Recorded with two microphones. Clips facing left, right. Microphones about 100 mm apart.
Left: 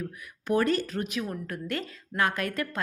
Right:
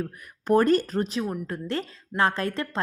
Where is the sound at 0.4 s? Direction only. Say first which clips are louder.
Right 5 dB; 40° right (ahead or behind).